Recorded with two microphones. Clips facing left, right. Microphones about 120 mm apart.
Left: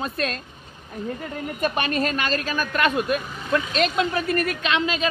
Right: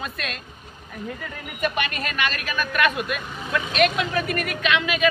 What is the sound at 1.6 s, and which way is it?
Speech, 35° left (ahead or behind).